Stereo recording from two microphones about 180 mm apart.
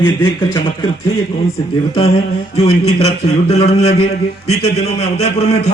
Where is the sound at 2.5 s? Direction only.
35° left (ahead or behind).